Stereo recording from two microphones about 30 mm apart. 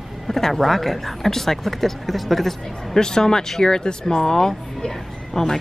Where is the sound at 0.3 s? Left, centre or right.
Centre.